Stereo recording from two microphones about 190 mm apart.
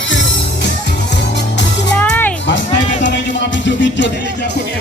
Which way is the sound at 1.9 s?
10° left (ahead or behind).